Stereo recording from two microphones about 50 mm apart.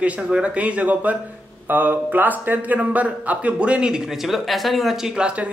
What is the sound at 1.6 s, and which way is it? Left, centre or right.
A man's voice, right.